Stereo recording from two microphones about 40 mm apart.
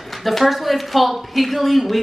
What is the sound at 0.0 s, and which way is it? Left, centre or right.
A woman's voice, centre.